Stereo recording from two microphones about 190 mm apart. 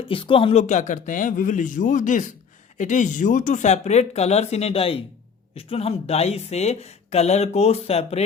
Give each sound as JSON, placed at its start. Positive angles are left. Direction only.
{"t": 0.1, "sound": "speech", "side_deg": 30}
{"t": 0.7, "sound": "speech", "side_deg": 40}